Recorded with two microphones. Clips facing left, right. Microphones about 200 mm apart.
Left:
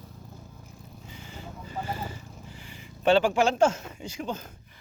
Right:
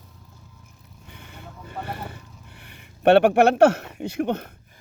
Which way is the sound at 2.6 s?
65° right (ahead or behind).